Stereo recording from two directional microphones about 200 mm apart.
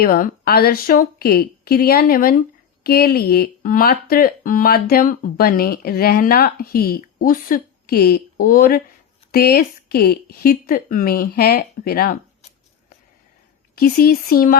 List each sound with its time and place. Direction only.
0.0 s speech: 45° left (ahead or behind)
13.7 s speech: 50° left (ahead or behind)